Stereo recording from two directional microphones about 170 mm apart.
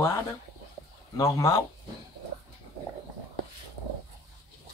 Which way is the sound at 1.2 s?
20° left (ahead or behind).